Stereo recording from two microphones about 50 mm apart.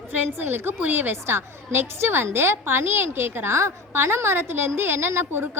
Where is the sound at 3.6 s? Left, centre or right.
Right.